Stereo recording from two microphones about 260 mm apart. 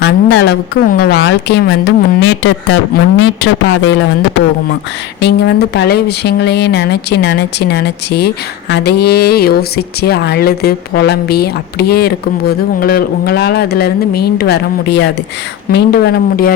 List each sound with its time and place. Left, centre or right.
0.0 s speech: left
5.2 s speech: left